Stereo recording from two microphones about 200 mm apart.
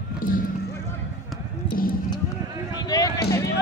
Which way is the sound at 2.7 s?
20° left (ahead or behind).